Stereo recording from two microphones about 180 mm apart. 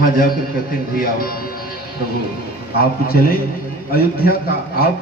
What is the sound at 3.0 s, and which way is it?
A man's voice, 55° left (ahead or behind).